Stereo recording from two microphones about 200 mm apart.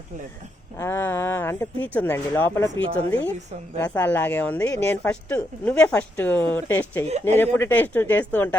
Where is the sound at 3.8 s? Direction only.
10° left (ahead or behind).